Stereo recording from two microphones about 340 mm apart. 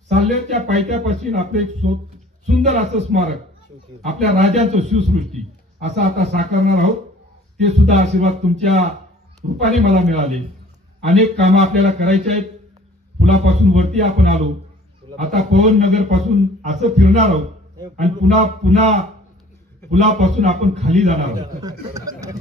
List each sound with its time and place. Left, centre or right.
0.1 s a man's voice: centre